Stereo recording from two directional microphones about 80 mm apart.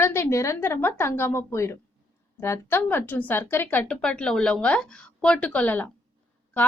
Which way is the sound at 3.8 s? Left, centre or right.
Centre.